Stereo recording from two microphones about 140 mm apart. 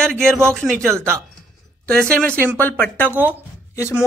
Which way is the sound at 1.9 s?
5° left (ahead or behind).